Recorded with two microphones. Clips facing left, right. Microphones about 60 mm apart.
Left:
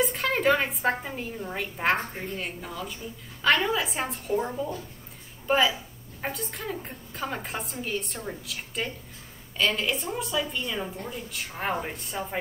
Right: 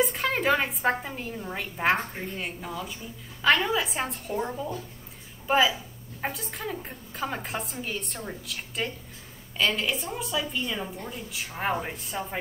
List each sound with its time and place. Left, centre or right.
0.0 s a woman's voice: centre